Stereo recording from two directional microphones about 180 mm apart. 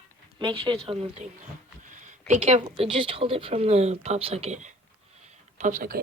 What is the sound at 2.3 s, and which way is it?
Speech, 40° right (ahead or behind).